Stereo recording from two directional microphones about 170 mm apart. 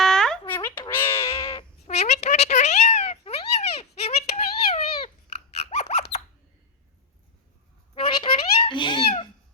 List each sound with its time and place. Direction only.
0.0 s a sound: 5° left (ahead or behind)
1.2 s cat: 35° left (ahead or behind)
5.7 s squeak: 40° left (ahead or behind)
7.9 s cat: 35° left (ahead or behind)